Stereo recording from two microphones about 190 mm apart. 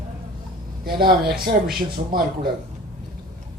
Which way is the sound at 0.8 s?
50° right (ahead or behind).